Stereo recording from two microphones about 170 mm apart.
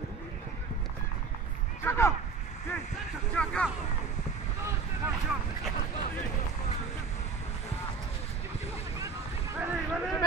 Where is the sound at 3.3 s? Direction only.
5° left (ahead or behind).